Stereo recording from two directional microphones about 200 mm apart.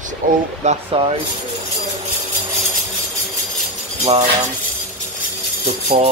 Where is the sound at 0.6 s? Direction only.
30° right (ahead or behind).